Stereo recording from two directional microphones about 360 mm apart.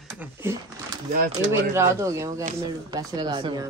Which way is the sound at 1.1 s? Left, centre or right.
Right.